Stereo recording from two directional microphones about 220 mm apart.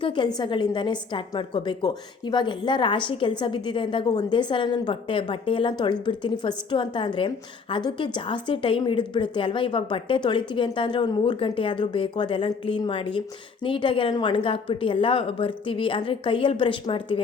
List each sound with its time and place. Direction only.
0.0 s a woman's voice: 20° left (ahead or behind)